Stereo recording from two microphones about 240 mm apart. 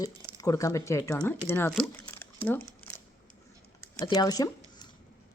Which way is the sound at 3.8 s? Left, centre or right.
Centre.